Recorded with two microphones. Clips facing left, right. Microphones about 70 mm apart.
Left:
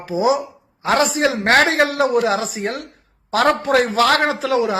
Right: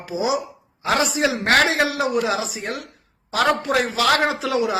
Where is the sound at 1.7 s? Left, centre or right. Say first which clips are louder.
Left 4 dB; left.